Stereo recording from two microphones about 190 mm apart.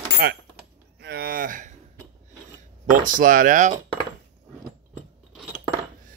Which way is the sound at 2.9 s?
45° right (ahead or behind).